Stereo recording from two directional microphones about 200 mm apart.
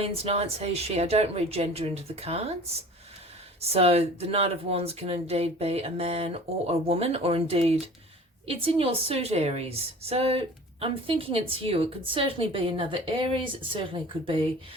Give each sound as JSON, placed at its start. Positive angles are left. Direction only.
{"t": 0.0, "sound": "speech", "side_deg": -30}
{"t": 3.6, "sound": "a woman's voice", "side_deg": -30}